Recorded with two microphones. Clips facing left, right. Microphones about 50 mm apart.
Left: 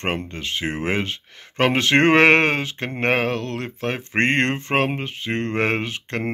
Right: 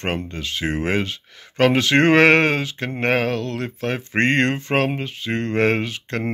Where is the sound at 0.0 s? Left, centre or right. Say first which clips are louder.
Even; left.